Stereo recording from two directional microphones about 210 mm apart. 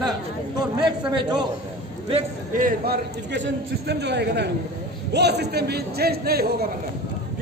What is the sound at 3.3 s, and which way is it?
A man's voice, 55° right (ahead or behind).